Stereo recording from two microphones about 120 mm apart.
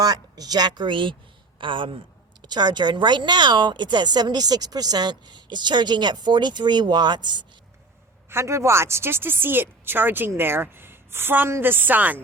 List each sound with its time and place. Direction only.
0.0 s a woman's voice: 35° right (ahead or behind)
8.3 s a woman's voice: 20° right (ahead or behind)